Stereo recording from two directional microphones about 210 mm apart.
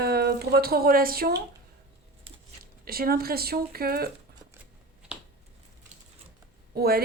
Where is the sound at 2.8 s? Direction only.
45° right (ahead or behind).